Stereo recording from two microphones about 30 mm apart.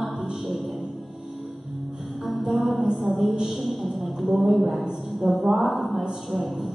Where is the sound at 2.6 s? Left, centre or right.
Centre.